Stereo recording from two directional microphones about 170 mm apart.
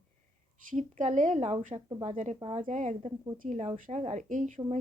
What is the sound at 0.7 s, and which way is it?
A woman's voice, 50° right (ahead or behind).